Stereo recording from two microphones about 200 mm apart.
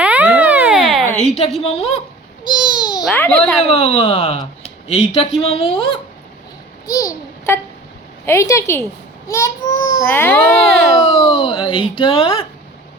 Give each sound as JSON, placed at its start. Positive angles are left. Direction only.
{"t": 0.0, "sound": "a sound", "side_deg": -5}
{"t": 1.6, "sound": "a woman's voice", "side_deg": 30}
{"t": 2.5, "sound": "babbling", "side_deg": 20}
{"t": 3.0, "sound": "a child's voice", "side_deg": 5}
{"t": 3.6, "sound": "speech", "side_deg": 30}
{"t": 6.8, "sound": "a sound", "side_deg": 20}
{"t": 8.3, "sound": "a child's voice", "side_deg": 15}
{"t": 10.9, "sound": "speech", "side_deg": 25}